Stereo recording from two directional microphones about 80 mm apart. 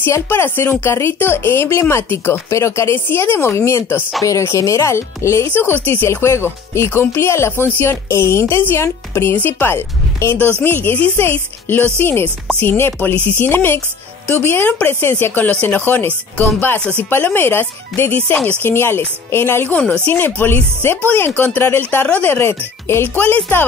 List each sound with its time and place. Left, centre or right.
0.0 s speech: left
5.5 s speech: left
19.7 s speech: centre